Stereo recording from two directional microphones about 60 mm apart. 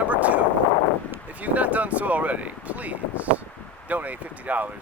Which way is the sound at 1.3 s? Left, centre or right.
Right.